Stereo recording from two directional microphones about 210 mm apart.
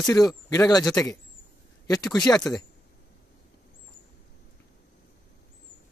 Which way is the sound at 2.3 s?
10° left (ahead or behind).